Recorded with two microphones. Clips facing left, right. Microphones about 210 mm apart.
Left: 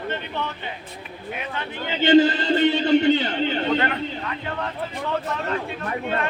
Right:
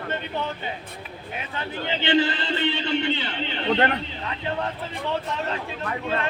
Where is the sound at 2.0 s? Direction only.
40° left (ahead or behind).